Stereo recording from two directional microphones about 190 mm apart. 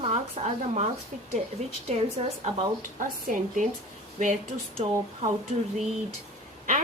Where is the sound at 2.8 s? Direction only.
45° right (ahead or behind).